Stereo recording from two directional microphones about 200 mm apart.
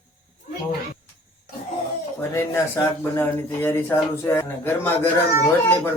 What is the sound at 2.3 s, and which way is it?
Speech, 15° left (ahead or behind).